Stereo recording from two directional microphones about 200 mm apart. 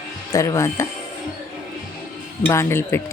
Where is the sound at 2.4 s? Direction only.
10° left (ahead or behind).